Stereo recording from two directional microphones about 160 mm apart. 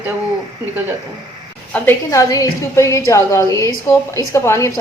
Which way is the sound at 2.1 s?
20° left (ahead or behind).